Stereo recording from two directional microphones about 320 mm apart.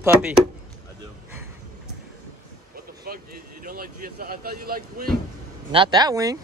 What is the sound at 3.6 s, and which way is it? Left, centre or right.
Speech, right.